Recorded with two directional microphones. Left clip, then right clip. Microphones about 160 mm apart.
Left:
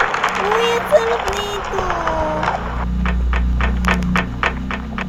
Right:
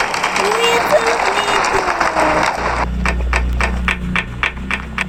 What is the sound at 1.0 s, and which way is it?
Speech, 15° right (ahead or behind).